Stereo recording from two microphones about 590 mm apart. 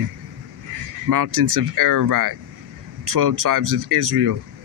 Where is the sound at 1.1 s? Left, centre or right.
Right.